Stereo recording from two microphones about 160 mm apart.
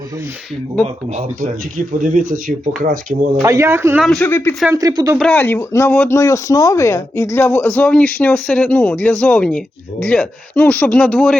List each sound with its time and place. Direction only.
1.1 s speech: 50° right (ahead or behind)
3.4 s speech: 20° right (ahead or behind)
4.0 s speech: centre (ahead or behind)
4.3 s speech: 15° left (ahead or behind)
4.7 s speech: 20° right (ahead or behind)
5.3 s speech: 15° left (ahead or behind)